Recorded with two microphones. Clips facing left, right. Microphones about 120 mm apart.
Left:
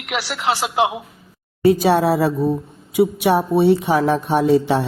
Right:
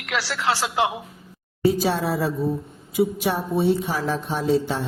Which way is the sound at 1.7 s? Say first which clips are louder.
Left 7 dB; 65° left (ahead or behind).